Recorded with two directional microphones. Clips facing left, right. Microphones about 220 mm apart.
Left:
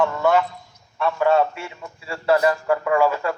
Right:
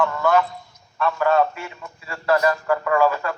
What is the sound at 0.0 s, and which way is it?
A man's voice, 25° left (ahead or behind).